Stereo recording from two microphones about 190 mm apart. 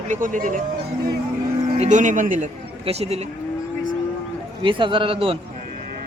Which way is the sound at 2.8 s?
35° right (ahead or behind).